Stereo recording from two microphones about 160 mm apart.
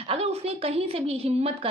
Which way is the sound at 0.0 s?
40° right (ahead or behind).